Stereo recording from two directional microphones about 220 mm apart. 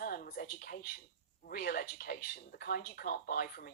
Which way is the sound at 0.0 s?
40° left (ahead or behind).